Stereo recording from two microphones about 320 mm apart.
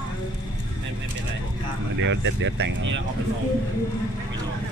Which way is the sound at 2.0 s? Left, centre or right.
Right.